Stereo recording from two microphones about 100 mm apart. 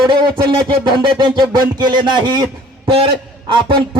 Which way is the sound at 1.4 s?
45° right (ahead or behind).